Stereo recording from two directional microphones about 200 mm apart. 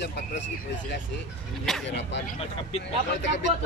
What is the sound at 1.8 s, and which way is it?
Speech, 60° left (ahead or behind).